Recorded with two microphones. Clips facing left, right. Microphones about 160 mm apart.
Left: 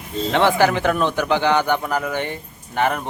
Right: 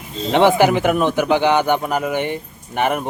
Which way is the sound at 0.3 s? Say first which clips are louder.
Right 4 dB; 20° right (ahead or behind).